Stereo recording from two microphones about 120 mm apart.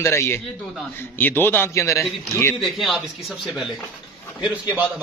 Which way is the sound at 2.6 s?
Centre (ahead or behind).